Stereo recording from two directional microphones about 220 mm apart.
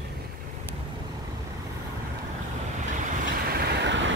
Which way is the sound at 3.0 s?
45° right (ahead or behind).